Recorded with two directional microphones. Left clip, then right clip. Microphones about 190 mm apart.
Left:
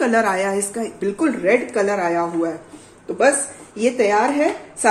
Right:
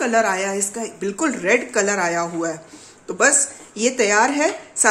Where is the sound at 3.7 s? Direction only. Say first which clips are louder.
Even; 25° right (ahead or behind).